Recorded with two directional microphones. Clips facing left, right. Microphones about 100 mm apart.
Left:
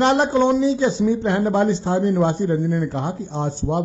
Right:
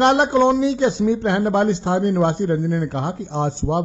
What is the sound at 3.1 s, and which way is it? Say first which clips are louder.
Speech: right 2 dB; 70° right (ahead or behind).